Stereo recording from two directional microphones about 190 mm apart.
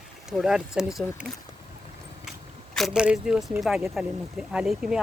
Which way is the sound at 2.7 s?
Centre (ahead or behind).